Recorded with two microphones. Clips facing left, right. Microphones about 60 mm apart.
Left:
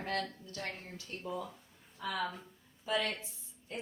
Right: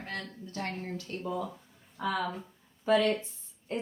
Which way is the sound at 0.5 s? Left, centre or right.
Right.